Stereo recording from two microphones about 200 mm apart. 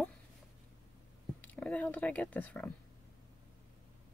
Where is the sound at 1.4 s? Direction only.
5° left (ahead or behind).